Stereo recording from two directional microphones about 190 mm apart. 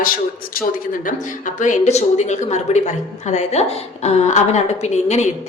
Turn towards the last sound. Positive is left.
turn(degrees=35)  # may be behind; listen again after turning